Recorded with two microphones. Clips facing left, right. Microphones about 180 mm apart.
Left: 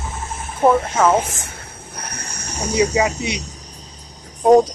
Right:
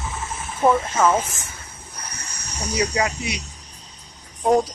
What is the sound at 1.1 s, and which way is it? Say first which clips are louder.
Snake: left 4 dB; 65° left (ahead or behind).